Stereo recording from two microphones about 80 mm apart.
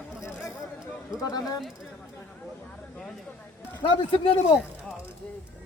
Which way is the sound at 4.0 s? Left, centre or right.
Left.